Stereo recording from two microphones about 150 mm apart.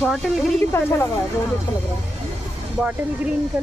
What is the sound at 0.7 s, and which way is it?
Speech, 15° left (ahead or behind).